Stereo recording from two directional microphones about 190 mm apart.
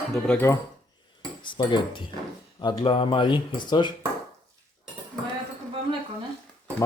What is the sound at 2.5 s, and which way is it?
Speech, 20° left (ahead or behind).